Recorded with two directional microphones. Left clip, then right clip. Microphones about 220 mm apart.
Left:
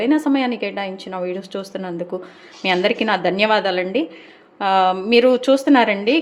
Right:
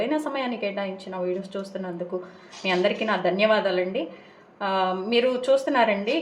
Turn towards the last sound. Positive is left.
turn(degrees=45)  # may be behind; listen again after turning